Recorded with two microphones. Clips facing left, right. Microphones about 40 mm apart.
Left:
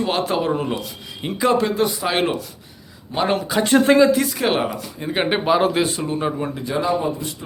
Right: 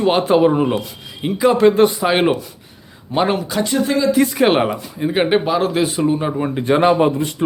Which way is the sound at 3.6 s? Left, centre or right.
Left.